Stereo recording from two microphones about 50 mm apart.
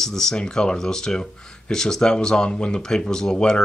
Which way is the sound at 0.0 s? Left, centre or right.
Centre.